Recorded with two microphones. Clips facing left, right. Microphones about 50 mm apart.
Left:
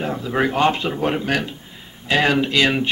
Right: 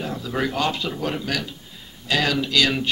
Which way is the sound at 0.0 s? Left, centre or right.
Left.